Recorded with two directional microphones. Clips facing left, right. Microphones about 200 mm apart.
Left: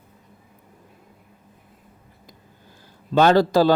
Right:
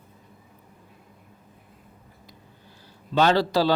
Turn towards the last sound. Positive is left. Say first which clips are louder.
# left 5 dB
turn(degrees=50)  # may be behind; listen again after turning